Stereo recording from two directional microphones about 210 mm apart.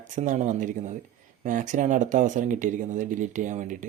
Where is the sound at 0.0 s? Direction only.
35° right (ahead or behind).